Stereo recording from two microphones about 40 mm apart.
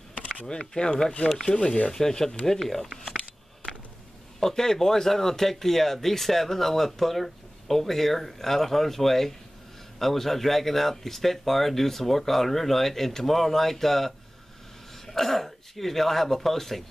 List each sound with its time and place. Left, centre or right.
0.5 s speech: centre
4.4 s speech: centre